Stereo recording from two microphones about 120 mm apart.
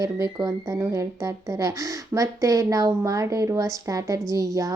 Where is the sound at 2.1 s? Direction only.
25° right (ahead or behind).